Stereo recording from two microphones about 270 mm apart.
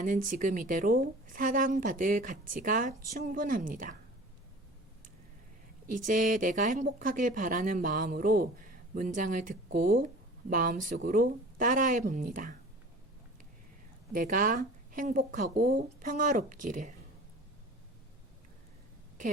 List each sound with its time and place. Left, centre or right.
0.0 s a woman's voice: right
5.9 s a woman's voice: right
14.1 s a woman's voice: right